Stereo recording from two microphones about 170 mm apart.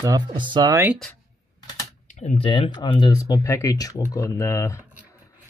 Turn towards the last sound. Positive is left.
turn(degrees=15)  # may be behind; listen again after turning